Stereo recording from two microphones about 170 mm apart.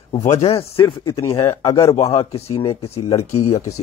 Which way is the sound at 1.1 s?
20° left (ahead or behind).